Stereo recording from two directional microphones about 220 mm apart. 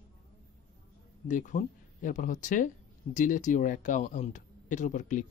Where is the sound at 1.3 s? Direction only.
35° left (ahead or behind).